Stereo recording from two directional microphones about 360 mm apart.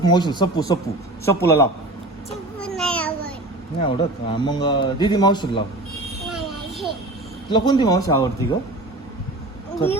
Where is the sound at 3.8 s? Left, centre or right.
Centre.